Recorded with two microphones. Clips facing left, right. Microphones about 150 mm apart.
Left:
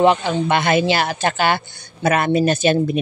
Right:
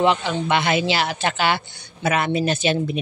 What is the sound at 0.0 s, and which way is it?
Speech, 45° left (ahead or behind).